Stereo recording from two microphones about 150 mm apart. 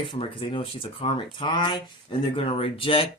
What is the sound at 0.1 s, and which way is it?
Speech, 35° left (ahead or behind).